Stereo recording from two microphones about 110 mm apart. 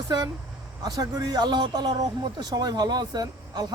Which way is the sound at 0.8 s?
35° right (ahead or behind).